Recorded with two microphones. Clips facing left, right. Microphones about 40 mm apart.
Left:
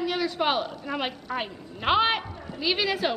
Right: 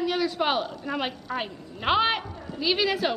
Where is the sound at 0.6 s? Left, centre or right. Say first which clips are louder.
Right 1 dB; left.